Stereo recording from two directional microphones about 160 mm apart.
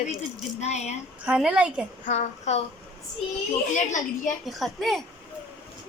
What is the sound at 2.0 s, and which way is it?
Speech, 45° left (ahead or behind).